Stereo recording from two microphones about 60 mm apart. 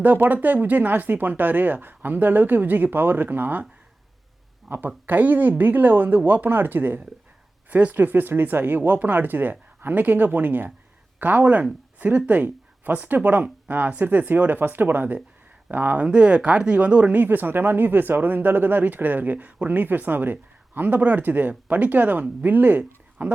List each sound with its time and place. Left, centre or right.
0.0 s speech: right
4.9 s speech: right